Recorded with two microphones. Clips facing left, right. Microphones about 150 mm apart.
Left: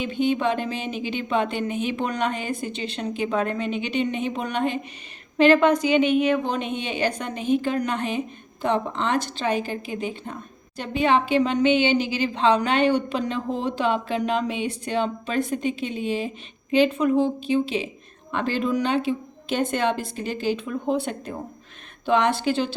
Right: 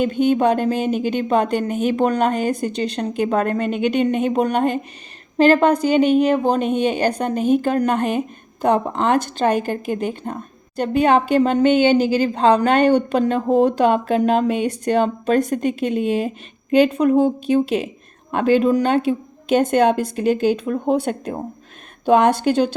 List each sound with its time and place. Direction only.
0.0 s a woman's voice: 45° right (ahead or behind)